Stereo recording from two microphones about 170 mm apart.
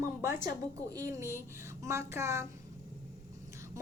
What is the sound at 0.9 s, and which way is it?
A woman's voice, 20° right (ahead or behind).